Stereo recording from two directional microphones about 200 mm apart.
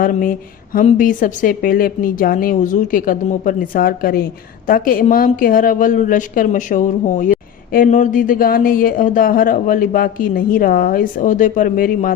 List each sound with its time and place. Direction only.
0.0 s a woman's voice: 45° left (ahead or behind)